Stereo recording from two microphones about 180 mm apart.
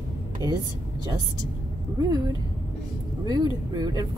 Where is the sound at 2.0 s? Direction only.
20° right (ahead or behind).